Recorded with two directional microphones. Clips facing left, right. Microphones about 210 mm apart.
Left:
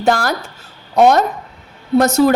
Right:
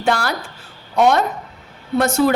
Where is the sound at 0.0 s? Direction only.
45° left (ahead or behind).